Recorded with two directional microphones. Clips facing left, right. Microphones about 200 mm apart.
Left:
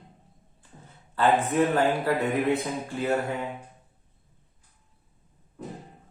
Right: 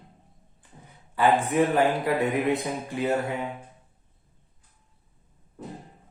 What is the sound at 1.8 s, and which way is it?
Speech, 15° right (ahead or behind).